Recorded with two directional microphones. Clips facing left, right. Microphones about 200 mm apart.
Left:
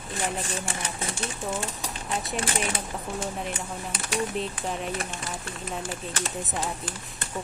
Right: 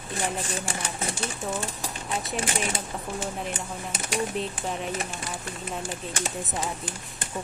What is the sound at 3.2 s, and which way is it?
A woman's voice, centre (ahead or behind).